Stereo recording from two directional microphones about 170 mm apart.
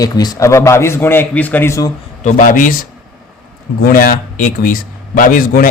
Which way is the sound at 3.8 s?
55° left (ahead or behind).